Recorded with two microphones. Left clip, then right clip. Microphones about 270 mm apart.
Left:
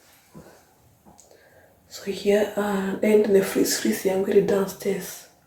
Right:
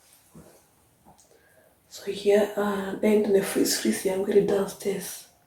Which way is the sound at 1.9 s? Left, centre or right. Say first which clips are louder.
Even; centre.